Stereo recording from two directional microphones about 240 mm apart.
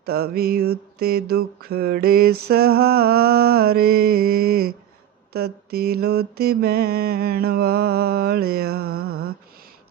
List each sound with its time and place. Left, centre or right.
0.0 s mantra: right